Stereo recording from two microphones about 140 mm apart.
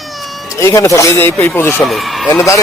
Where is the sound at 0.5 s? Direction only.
20° left (ahead or behind).